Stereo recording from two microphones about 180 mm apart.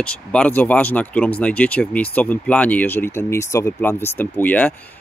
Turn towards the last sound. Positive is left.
turn(degrees=10)  # may be behind; listen again after turning